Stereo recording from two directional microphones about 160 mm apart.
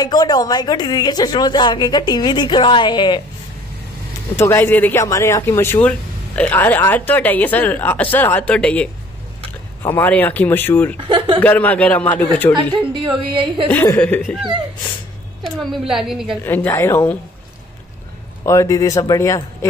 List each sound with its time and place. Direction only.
0.0 s speech: 25° left (ahead or behind)
4.4 s speech: 15° left (ahead or behind)
9.8 s speech: 10° left (ahead or behind)
11.1 s speech: 35° right (ahead or behind)
11.4 s speech: 10° left (ahead or behind)
12.5 s a woman's voice: 30° right (ahead or behind)
13.7 s speech: 10° left (ahead or behind)
14.2 s a woman's voice: centre (ahead or behind)
16.4 s speech: 15° left (ahead or behind)
18.4 s speech: 20° left (ahead or behind)